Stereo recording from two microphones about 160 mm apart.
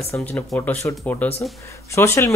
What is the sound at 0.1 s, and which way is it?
Speech, 10° left (ahead or behind).